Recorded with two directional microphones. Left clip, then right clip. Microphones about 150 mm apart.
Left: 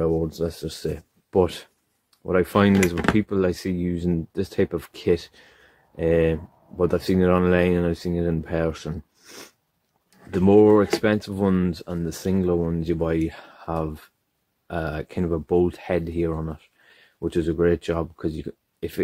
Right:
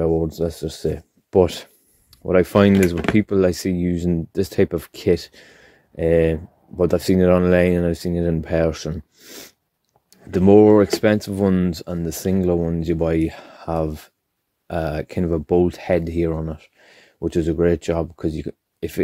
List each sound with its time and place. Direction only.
0.0 s speech: 35° right (ahead or behind)
8.9 s a sound: 30° right (ahead or behind)
10.3 s speech: 35° right (ahead or behind)